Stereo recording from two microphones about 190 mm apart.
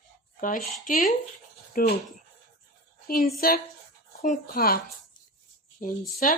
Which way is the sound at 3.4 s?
50° left (ahead or behind).